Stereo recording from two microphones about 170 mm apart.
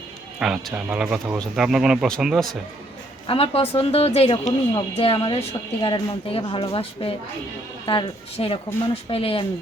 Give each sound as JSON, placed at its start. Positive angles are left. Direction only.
{"t": 0.3, "sound": "speech", "side_deg": -5}
{"t": 3.2, "sound": "speech", "side_deg": 35}